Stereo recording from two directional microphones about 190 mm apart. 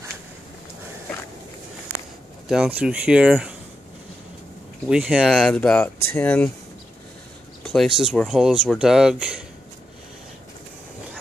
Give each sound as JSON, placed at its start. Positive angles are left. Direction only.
{"t": 2.4, "sound": "speech", "side_deg": -5}
{"t": 4.8, "sound": "speech", "side_deg": -5}
{"t": 7.6, "sound": "speech", "side_deg": 0}